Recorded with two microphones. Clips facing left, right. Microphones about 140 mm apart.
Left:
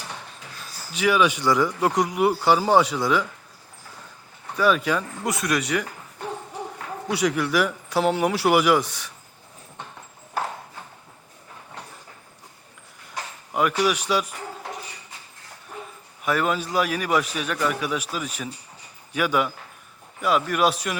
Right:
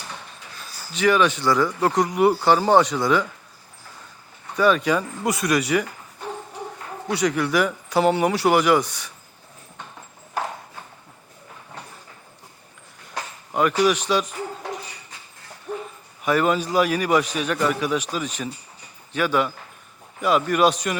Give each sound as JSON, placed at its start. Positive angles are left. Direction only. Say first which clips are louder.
{"t": 0.9, "sound": "speech", "louder": "right 2 dB", "side_deg": 5}
{"t": 4.5, "sound": "speech", "louder": "right 2 dB", "side_deg": 0}
{"t": 7.1, "sound": "speech", "louder": "right 1 dB", "side_deg": 5}
{"t": 13.5, "sound": "speech", "louder": "right 3 dB", "side_deg": 5}
{"t": 16.2, "sound": "speech", "louder": "right 3 dB", "side_deg": 0}